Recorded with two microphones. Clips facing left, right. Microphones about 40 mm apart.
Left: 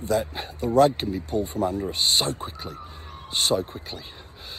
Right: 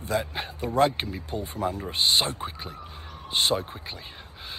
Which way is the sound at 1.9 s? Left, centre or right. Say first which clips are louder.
Even; right.